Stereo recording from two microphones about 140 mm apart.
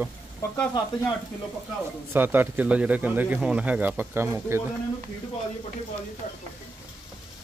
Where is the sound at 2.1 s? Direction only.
15° right (ahead or behind).